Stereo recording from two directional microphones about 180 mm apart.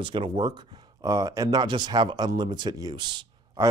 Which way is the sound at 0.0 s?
30° right (ahead or behind).